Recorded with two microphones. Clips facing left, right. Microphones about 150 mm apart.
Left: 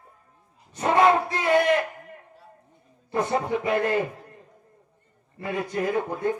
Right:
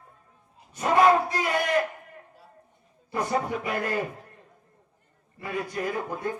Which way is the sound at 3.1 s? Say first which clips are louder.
Left 3 dB; 25° left (ahead or behind).